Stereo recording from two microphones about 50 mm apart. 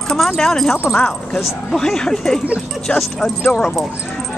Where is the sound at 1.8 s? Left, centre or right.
Centre.